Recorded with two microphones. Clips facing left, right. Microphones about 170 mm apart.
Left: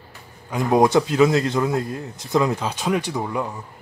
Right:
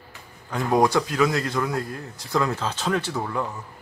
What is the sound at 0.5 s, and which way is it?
Speech, 15° left (ahead or behind).